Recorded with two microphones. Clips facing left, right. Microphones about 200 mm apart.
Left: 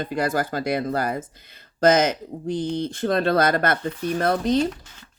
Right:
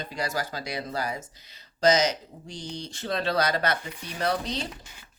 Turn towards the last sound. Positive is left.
turn(degrees=-10)  # may be behind; listen again after turning